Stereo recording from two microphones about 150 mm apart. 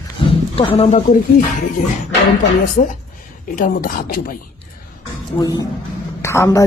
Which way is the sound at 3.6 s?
65° left (ahead or behind).